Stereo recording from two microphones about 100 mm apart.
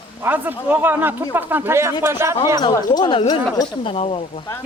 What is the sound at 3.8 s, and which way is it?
Speech, 80° left.